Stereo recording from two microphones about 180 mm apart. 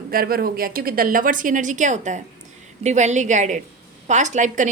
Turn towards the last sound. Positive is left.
turn(degrees=-45)  # may be behind; listen again after turning